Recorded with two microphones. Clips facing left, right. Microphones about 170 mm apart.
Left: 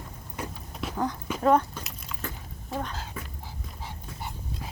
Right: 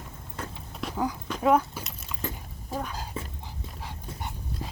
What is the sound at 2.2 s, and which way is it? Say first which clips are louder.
Dog: right 3 dB; 10° right (ahead or behind).